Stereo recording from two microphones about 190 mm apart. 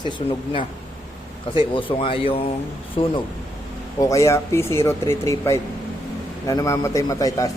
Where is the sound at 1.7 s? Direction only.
25° left (ahead or behind).